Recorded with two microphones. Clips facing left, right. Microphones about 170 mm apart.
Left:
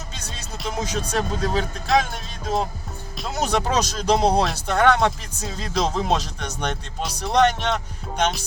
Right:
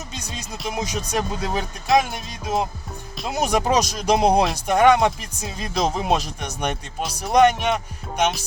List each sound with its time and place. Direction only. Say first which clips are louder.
0.1 s music: right 3 dB; 10° right (ahead or behind)
0.7 s speech: even; 10° right (ahead or behind)